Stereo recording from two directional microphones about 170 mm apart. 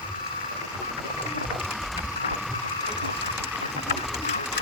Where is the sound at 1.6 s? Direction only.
Centre (ahead or behind).